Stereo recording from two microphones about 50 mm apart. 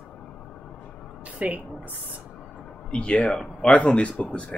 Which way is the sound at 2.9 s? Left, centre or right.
Left.